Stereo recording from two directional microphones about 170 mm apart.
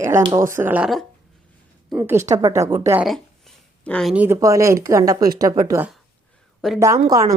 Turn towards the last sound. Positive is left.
turn(degrees=-20)  # may be behind; listen again after turning